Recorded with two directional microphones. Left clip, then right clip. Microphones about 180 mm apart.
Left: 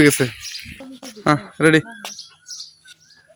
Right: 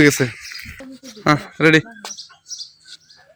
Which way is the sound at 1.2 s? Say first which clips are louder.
Right 1 dB; centre (ahead or behind).